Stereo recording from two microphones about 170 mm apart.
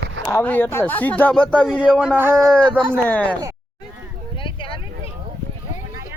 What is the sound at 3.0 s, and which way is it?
Speech, 10° left (ahead or behind).